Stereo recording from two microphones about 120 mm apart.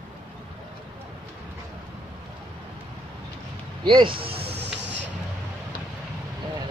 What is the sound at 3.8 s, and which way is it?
Speech, 40° right (ahead or behind).